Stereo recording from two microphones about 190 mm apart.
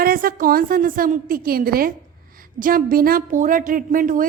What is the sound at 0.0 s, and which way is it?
A woman's voice, 50° right (ahead or behind).